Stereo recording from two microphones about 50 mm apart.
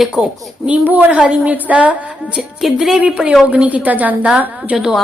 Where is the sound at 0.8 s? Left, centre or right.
Right.